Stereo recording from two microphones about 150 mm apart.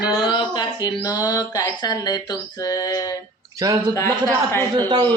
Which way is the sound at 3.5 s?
25° right (ahead or behind).